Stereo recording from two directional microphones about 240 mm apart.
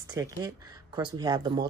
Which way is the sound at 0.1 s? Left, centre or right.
Centre.